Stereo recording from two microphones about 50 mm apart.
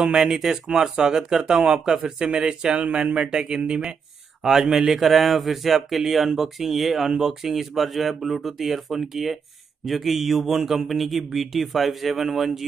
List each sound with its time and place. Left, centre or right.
0.0 s speech: centre